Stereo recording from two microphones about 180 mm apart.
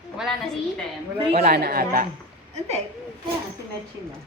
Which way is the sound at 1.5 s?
55° right (ahead or behind).